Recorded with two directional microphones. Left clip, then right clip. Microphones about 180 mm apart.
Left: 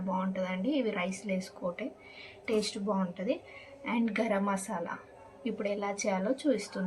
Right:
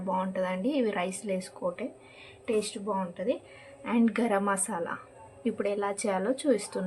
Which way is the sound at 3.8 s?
40° right (ahead or behind).